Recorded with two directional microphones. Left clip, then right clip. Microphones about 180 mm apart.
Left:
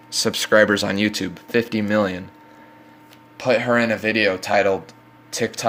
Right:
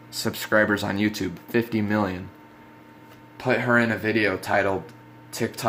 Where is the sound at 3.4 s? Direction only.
35° left (ahead or behind).